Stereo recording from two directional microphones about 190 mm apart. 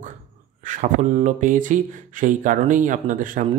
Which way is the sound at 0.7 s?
40° right (ahead or behind).